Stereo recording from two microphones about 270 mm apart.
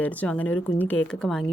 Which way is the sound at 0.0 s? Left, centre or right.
Centre.